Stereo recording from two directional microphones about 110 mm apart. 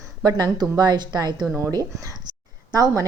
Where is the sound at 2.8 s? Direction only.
30° right (ahead or behind).